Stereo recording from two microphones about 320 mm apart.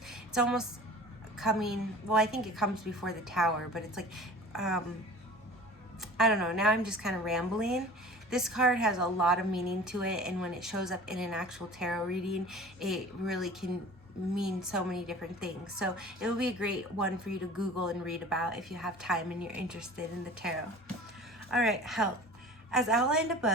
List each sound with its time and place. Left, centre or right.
0.1 s a sound: centre
1.4 s a woman's voice: centre
6.0 s a woman's voice: centre
21.5 s a woman's voice: centre